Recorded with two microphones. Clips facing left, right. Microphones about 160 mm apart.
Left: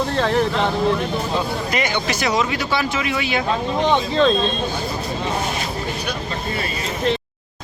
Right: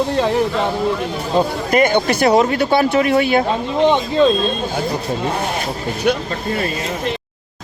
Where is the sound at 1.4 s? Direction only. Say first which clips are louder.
Right 12 dB; 50° right (ahead or behind).